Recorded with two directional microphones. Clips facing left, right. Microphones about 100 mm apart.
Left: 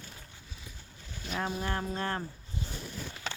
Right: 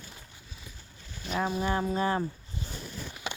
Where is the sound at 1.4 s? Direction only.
5° right (ahead or behind).